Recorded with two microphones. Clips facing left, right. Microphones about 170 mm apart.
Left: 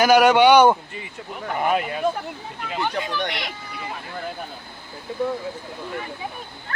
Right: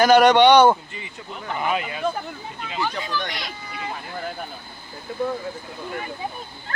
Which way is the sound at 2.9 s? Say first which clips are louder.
Left 2 dB; 15° left (ahead or behind).